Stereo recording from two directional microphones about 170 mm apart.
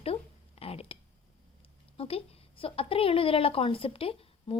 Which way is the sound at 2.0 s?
35° left (ahead or behind).